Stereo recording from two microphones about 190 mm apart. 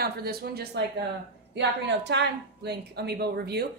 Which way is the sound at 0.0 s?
55° right (ahead or behind).